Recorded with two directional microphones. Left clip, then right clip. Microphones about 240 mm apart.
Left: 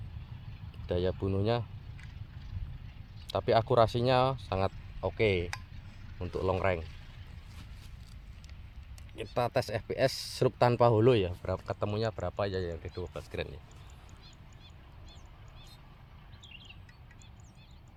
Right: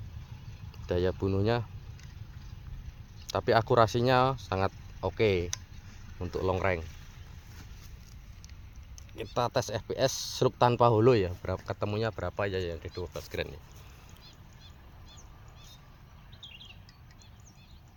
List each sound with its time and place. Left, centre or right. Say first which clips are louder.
0.9 s speech: right 2 dB; right
3.2 s speech: right 1 dB; right
9.3 s speech: right 1 dB; centre